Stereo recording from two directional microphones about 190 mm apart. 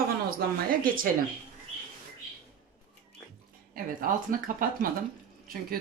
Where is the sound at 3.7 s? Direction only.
45° right (ahead or behind).